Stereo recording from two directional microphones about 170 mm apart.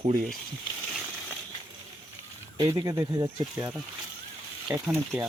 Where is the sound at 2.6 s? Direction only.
20° right (ahead or behind).